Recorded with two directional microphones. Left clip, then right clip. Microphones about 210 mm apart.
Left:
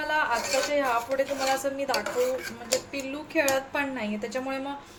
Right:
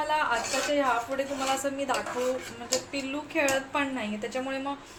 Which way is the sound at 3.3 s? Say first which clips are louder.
Left 2 dB; 10° left (ahead or behind).